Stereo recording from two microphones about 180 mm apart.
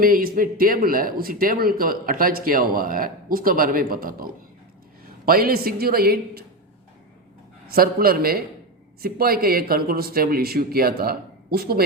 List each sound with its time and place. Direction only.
0.0 s speech: 55° right (ahead or behind)
7.7 s speech: 55° right (ahead or behind)